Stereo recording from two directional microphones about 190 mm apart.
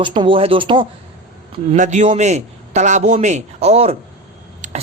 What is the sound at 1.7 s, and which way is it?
A man's voice, 40° right (ahead or behind).